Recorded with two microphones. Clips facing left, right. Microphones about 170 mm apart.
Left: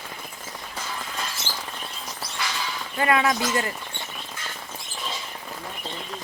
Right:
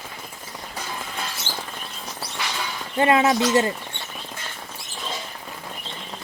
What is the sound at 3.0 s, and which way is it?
Speech, 25° right (ahead or behind).